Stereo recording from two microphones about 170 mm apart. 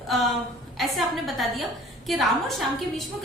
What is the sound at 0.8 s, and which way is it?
A woman's voice, centre (ahead or behind).